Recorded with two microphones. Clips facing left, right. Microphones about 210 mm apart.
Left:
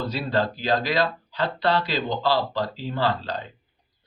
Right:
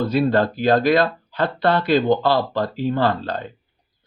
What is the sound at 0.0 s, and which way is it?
A man's voice, 55° right (ahead or behind).